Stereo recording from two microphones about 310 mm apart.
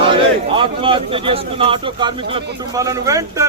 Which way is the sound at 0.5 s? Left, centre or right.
Centre.